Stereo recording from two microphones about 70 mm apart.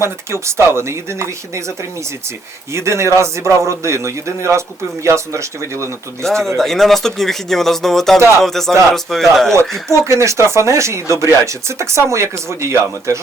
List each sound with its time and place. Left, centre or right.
0.0 s speech: right
2.7 s speech: right
6.2 s speech: centre
10.0 s speech: right